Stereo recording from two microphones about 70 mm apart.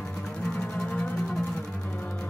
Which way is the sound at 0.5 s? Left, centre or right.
Centre.